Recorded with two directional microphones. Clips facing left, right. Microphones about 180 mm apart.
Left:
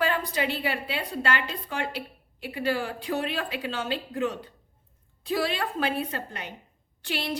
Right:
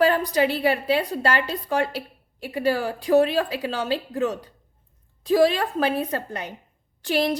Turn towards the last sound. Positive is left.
turn(degrees=-40)  # may be behind; listen again after turning